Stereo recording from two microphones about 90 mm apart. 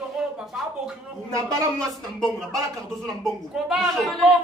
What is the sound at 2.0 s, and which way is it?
A woman's voice, 5° left (ahead or behind).